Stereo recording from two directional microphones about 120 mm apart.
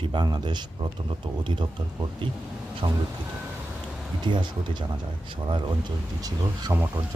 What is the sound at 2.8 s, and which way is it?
Speech, 40° right (ahead or behind).